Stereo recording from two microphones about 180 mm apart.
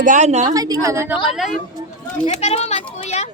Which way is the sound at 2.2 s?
35° left (ahead or behind).